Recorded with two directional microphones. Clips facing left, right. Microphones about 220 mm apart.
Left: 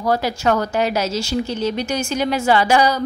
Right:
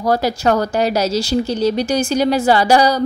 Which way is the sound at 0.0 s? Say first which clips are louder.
Right 3 dB; 40° right (ahead or behind).